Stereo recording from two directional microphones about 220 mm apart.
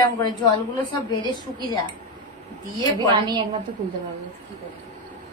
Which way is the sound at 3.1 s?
20° right (ahead or behind).